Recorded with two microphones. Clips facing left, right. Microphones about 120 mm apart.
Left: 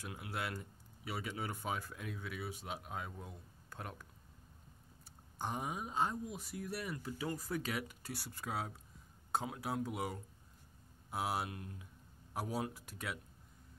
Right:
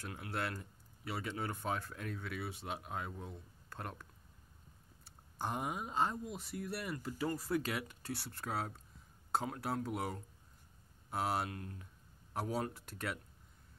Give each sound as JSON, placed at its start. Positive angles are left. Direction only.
{"t": 0.0, "sound": "speech", "side_deg": 10}
{"t": 5.4, "sound": "speech", "side_deg": 0}
{"t": 11.5, "sound": "speech", "side_deg": 15}
{"t": 12.4, "sound": "speech", "side_deg": 5}